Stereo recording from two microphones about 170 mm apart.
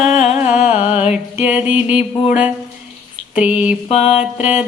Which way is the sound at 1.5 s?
10° right (ahead or behind).